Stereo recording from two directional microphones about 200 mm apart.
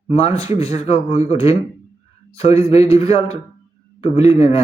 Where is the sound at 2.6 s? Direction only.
30° left (ahead or behind).